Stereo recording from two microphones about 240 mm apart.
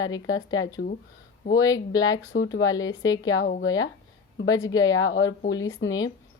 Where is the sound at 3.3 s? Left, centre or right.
Left.